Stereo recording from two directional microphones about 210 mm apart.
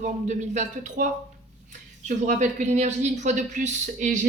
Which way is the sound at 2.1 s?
35° right (ahead or behind).